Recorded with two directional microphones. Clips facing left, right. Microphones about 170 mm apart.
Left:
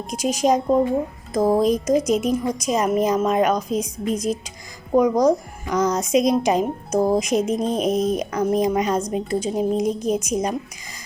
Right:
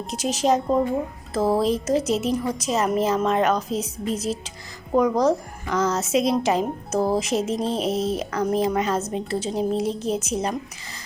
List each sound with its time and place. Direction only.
0.1 s a woman's voice: 10° left (ahead or behind)